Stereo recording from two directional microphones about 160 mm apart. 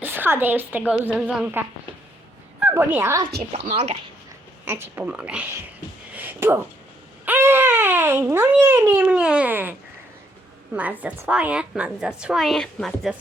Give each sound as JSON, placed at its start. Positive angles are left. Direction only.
{"t": 0.0, "sound": "a woman's voice", "side_deg": -15}
{"t": 3.5, "sound": "speech", "side_deg": -40}
{"t": 4.6, "sound": "a woman's voice", "side_deg": -15}
{"t": 6.1, "sound": "a sound", "side_deg": -15}
{"t": 7.3, "sound": "speech", "side_deg": -15}
{"t": 10.8, "sound": "a woman's voice", "side_deg": -10}